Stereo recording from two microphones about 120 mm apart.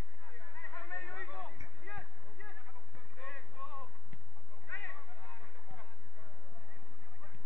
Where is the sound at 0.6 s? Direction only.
15° left (ahead or behind).